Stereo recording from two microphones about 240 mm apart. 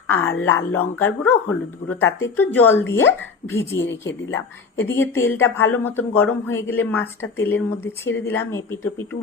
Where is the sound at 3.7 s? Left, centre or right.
Left.